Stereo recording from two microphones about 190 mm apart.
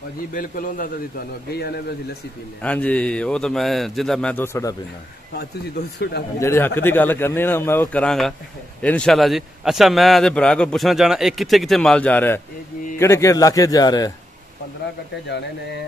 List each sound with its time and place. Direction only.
0.3 s a man's voice: 45° left (ahead or behind)
2.6 s a man's voice: 5° left (ahead or behind)
5.9 s a man's voice: 60° left (ahead or behind)
6.4 s a man's voice: 10° left (ahead or behind)